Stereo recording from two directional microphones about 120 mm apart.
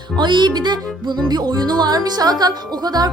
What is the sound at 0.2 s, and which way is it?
Music, 40° right (ahead or behind).